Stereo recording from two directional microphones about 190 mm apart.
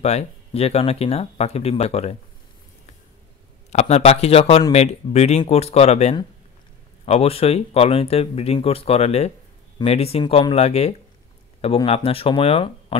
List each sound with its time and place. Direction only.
0.0 s speech: 35° left (ahead or behind)
3.7 s speech: 35° left (ahead or behind)